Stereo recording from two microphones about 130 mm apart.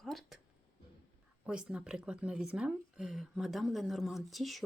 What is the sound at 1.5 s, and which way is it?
Speech, 5° right (ahead or behind).